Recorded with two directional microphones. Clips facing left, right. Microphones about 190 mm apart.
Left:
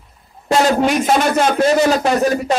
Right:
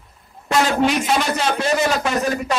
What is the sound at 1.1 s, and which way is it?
Speech, 50° left (ahead or behind).